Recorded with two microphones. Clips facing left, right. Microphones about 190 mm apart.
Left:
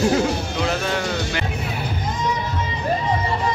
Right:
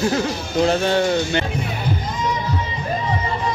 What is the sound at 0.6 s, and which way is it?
Speech, 30° right (ahead or behind).